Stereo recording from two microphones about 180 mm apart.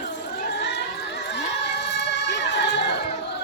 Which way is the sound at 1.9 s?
75° left (ahead or behind).